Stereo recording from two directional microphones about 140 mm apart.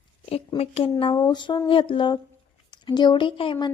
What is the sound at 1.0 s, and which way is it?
A woman's voice, 30° left (ahead or behind).